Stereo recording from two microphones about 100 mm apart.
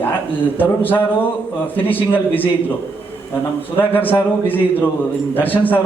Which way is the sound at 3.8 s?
20° left (ahead or behind).